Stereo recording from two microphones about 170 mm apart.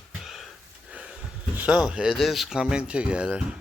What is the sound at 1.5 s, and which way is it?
Speech, 5° right (ahead or behind).